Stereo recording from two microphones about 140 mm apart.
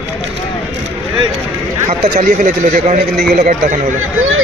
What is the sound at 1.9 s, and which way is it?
Speech, 65° right (ahead or behind).